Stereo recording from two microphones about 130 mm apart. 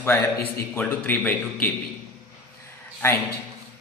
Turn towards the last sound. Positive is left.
turn(degrees=20)  # may be behind; listen again after turning